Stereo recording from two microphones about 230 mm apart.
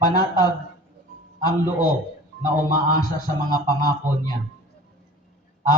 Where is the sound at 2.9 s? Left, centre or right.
Centre.